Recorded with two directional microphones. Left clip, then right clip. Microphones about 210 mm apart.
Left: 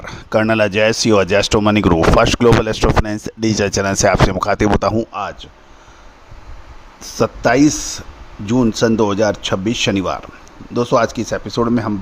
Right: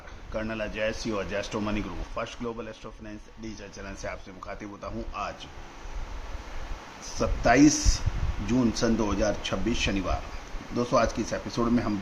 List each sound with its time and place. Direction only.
0.0 s speech: 55° left (ahead or behind)
7.0 s speech: 50° left (ahead or behind)